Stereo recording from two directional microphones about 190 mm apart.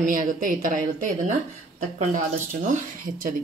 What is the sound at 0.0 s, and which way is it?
Speech, 45° right (ahead or behind).